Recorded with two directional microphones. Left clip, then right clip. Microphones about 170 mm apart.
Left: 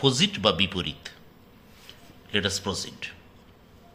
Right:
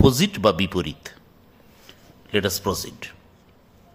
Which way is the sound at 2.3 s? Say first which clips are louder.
Right 4 dB; 55° right (ahead or behind).